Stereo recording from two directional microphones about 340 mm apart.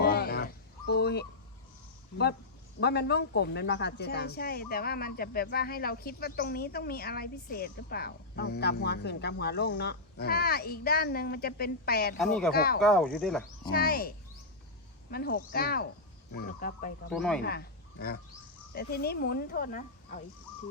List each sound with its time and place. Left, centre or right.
0.0 s a sound: left
2.8 s speech: left
12.2 s speech: centre
12.5 s speech: left
12.8 s speech: centre
13.7 s speech: left
15.1 s speech: left
17.1 s speech: centre
17.4 s speech: left